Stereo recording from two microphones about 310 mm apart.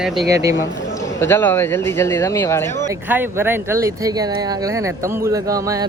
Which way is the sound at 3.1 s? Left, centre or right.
Centre.